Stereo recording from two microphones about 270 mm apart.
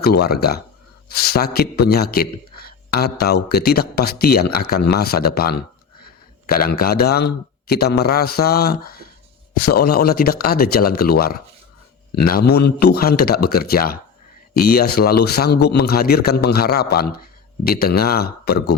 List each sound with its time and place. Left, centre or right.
0.0 s a man's voice: left